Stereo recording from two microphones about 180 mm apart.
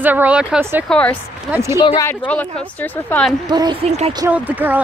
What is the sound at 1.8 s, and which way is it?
Speech, 25° left (ahead or behind).